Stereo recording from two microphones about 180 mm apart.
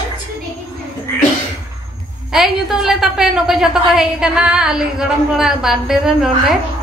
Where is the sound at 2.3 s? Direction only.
Centre (ahead or behind).